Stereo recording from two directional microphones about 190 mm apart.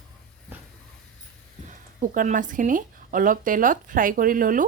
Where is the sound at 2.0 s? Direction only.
45° right (ahead or behind).